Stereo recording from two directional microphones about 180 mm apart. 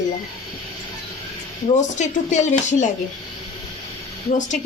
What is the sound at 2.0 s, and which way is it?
Speech, 40° left (ahead or behind).